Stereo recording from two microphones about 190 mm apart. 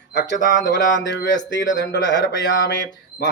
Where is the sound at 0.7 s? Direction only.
65° left (ahead or behind).